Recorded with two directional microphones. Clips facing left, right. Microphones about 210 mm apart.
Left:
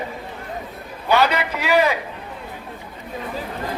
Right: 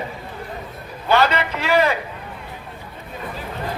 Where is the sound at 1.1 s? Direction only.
10° left (ahead or behind).